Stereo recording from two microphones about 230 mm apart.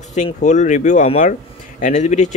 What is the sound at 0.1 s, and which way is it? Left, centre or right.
Speech, left.